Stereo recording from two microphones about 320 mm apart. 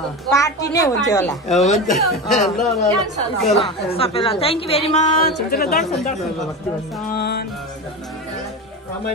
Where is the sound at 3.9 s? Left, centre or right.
Centre.